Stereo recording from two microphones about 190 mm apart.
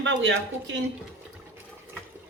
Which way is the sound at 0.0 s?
75° right (ahead or behind).